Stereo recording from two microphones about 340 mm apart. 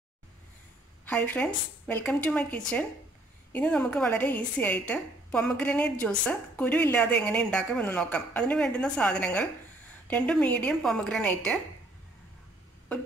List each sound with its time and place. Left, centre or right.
1.0 s a woman's voice: centre